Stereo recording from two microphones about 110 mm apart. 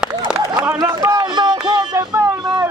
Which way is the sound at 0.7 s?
25° right (ahead or behind).